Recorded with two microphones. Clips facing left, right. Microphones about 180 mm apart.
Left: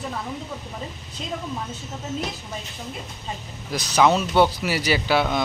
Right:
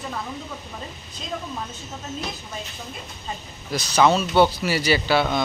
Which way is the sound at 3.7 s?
15° left (ahead or behind).